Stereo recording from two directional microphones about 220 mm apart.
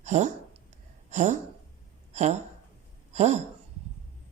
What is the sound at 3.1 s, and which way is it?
Speech, 30° right (ahead or behind).